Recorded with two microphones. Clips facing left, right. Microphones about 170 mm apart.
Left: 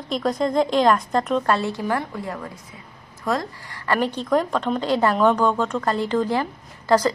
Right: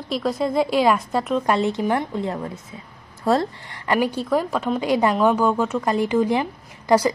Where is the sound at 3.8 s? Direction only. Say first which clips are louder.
Right 1 dB; 10° right (ahead or behind).